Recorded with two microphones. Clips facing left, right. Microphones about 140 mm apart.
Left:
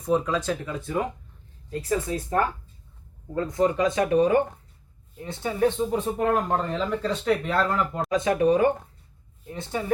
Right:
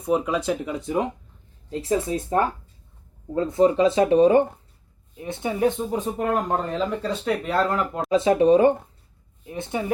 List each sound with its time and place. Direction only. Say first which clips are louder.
0.0 s speech: right 1 dB; 15° right (ahead or behind)
8.1 s speech: right 5 dB; 25° right (ahead or behind)